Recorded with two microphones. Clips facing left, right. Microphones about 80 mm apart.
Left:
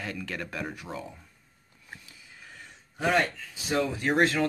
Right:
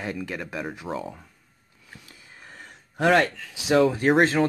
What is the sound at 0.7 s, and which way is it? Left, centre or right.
Speech, right.